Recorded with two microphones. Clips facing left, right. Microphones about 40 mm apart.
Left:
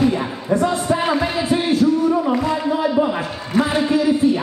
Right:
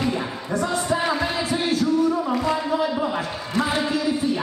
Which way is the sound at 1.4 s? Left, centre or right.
Left.